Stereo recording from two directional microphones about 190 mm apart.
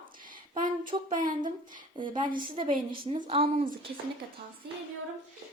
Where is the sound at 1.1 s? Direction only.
45° right (ahead or behind).